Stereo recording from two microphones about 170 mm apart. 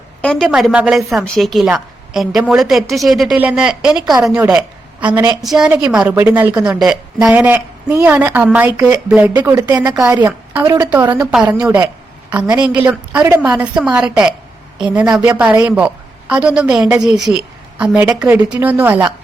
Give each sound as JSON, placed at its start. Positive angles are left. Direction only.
{"t": 0.2, "sound": "a sound", "side_deg": 5}
{"t": 0.4, "sound": "a woman's voice", "side_deg": -5}
{"t": 9.6, "sound": "speech", "side_deg": -20}
{"t": 10.0, "sound": "a woman's voice", "side_deg": -10}